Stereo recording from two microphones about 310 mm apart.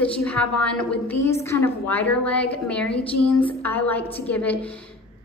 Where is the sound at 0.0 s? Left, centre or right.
Centre.